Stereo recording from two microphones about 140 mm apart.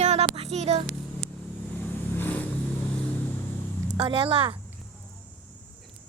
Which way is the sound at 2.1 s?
15° left (ahead or behind).